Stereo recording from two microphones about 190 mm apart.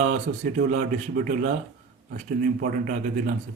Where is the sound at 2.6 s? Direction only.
45° right (ahead or behind).